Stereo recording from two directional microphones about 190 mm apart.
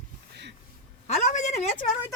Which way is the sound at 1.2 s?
35° left (ahead or behind).